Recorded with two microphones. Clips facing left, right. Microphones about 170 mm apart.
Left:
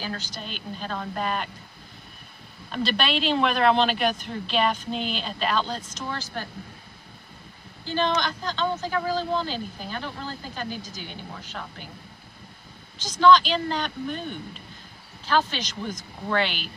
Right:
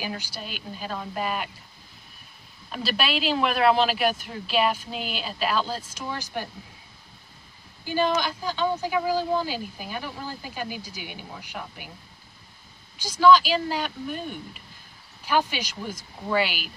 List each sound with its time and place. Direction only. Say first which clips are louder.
0.0 s speech: even; 10° right (ahead or behind)
2.7 s speech: left 2 dB; 5° right (ahead or behind)
7.8 s speech: right 1 dB; 10° right (ahead or behind)
13.0 s speech: even; 5° right (ahead or behind)